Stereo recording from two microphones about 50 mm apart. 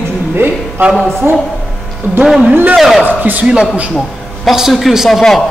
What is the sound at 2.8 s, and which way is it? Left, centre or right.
Speech, centre.